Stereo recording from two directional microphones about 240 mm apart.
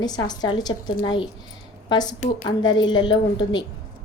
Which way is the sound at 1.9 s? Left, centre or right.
Centre.